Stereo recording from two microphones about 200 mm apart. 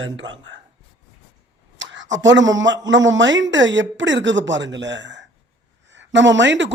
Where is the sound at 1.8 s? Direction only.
65° right (ahead or behind).